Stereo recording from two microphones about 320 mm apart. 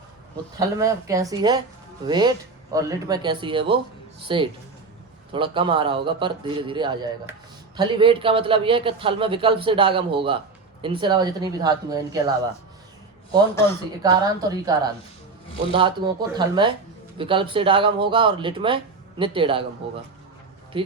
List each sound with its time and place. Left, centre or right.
0.5 s a man's voice: centre
14.0 s a man's voice: centre